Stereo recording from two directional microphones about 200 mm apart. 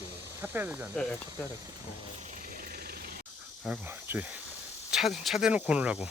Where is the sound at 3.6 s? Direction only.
10° right (ahead or behind).